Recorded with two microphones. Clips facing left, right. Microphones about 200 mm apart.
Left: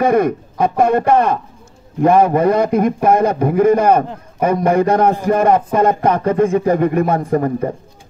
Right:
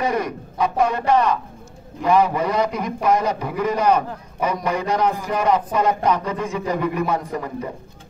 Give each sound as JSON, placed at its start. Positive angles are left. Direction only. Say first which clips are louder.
{"t": 0.0, "sound": "a man's voice", "louder": "left 9 dB", "side_deg": 55}